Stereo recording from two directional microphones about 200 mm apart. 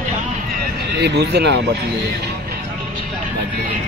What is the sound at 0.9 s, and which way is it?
Speech, 55° right (ahead or behind).